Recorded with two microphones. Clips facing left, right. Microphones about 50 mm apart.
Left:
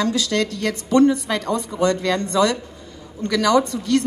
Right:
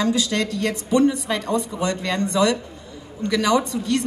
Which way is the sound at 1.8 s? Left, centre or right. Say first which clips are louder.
Left 4 dB; right.